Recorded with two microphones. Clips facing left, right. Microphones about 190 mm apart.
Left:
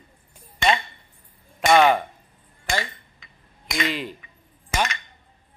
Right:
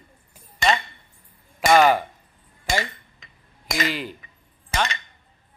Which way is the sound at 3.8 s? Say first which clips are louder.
Left 1 dB; centre (ahead or behind).